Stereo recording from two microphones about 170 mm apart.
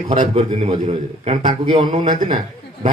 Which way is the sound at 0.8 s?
50° right (ahead or behind).